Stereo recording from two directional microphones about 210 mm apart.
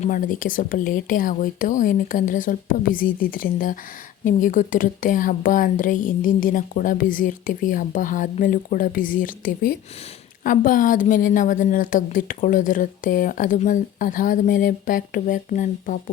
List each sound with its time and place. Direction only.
0.0 s a woman's voice: 40° left (ahead or behind)